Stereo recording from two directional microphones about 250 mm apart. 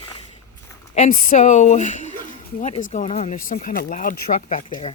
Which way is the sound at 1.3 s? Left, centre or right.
Left.